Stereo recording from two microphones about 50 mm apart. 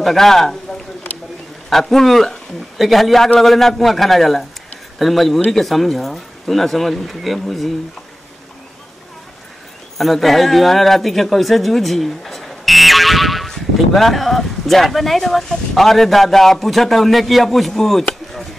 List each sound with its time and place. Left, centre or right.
0.0 s speech: centre
1.7 s speech: centre
9.9 s speech: centre